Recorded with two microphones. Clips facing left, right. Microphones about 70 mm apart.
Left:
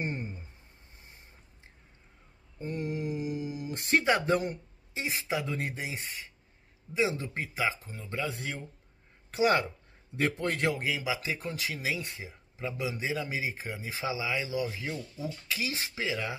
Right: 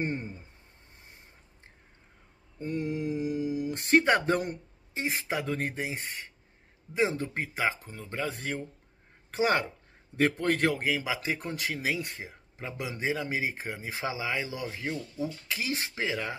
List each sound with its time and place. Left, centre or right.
0.0 s speech: right
2.8 s mantra: left
3.7 s speech: right
6.9 s speech: right
13.1 s speech: right
13.4 s speech: right